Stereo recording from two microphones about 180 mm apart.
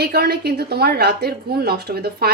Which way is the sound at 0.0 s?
65° right (ahead or behind).